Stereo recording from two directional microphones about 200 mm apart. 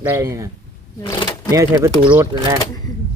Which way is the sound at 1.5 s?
15° right (ahead or behind).